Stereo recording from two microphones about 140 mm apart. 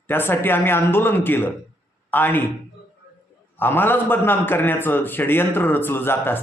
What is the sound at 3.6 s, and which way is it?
A man's voice, 15° left (ahead or behind).